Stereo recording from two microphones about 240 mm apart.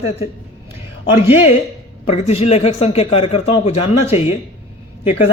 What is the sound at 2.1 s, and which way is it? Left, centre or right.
A man's voice, left.